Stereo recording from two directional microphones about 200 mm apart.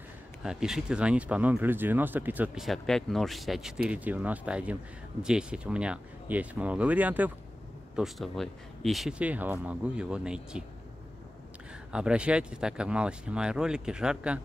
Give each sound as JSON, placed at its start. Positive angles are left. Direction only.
{"t": 0.4, "sound": "speech", "side_deg": -5}
{"t": 11.9, "sound": "speech", "side_deg": -5}